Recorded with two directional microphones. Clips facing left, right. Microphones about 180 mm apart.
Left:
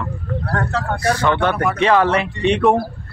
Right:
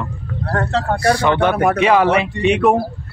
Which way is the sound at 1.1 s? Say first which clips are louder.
Right 2 dB; 15° right (ahead or behind).